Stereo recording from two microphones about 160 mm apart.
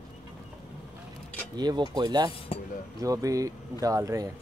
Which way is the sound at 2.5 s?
35° left (ahead or behind).